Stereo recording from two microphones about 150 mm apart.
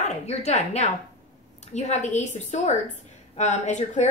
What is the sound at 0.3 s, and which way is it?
A woman's voice, 50° left (ahead or behind).